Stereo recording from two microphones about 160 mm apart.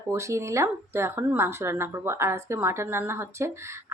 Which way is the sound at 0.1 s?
20° right (ahead or behind).